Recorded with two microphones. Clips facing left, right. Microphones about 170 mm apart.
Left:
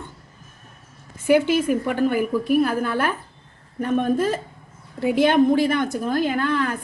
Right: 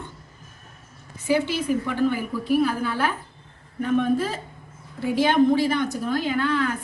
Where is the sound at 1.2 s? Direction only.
55° left (ahead or behind).